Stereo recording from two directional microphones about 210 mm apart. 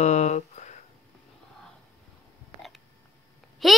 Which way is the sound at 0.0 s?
30° left (ahead or behind).